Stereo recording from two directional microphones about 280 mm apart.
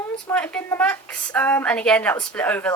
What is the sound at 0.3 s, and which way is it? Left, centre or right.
A woman's voice, centre.